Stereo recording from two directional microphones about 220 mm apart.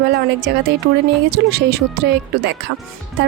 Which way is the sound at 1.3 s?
45° right (ahead or behind).